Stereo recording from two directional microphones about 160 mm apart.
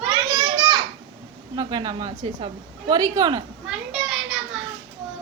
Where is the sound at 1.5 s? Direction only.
25° right (ahead or behind).